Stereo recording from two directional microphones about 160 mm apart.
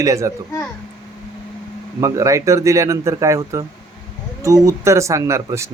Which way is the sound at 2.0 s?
20° right (ahead or behind).